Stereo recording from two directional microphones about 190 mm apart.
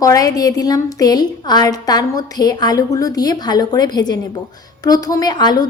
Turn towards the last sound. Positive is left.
turn(degrees=20)  # may be behind; listen again after turning